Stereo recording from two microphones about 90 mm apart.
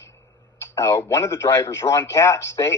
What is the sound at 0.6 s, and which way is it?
A man's voice, 30° left (ahead or behind).